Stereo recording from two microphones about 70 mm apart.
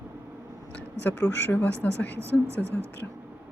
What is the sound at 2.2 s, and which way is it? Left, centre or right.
Speech, right.